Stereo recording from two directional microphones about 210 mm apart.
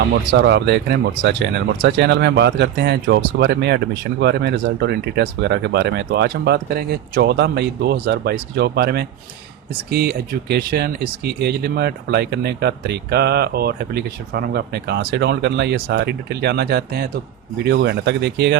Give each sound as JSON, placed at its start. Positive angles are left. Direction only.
{"t": 0.3, "sound": "speech", "side_deg": -55}